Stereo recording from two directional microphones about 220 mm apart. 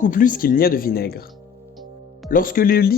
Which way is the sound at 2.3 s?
40° left (ahead or behind).